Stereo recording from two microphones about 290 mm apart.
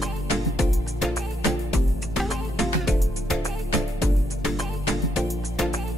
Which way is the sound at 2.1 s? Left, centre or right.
Centre.